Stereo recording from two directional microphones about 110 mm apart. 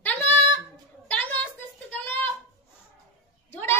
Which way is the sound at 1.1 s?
15° left (ahead or behind).